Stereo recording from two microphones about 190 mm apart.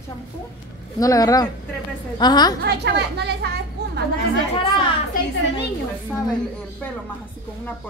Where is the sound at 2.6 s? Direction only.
60° right (ahead or behind).